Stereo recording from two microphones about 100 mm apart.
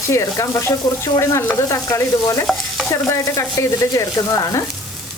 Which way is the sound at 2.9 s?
30° left (ahead or behind).